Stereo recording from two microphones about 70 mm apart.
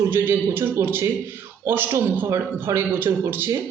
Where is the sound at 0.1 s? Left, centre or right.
Right.